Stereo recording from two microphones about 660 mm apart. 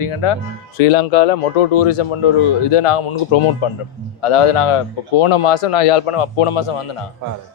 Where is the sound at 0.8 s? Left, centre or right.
Left.